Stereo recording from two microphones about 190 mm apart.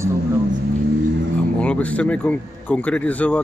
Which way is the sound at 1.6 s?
5° left (ahead or behind).